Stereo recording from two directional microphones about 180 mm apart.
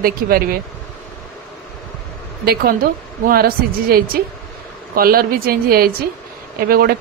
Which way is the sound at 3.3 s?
55° right (ahead or behind).